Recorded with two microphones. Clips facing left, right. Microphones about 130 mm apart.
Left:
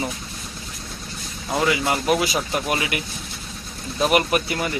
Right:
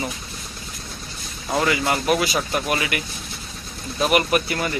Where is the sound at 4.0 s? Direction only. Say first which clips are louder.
Even; 20° left (ahead or behind).